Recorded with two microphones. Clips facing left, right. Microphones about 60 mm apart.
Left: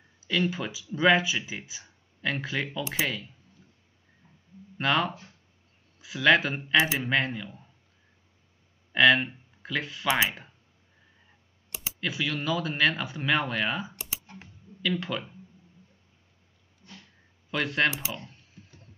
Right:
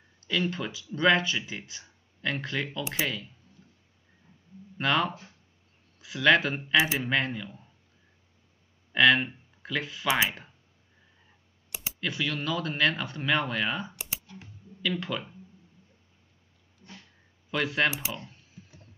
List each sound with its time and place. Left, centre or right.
0.2 s speech: centre
3.6 s a sound: centre
4.7 s speech: centre
8.9 s speech: centre
12.0 s speech: centre
14.2 s typing: left
14.8 s speech: centre
17.5 s speech: centre
18.1 s typing: centre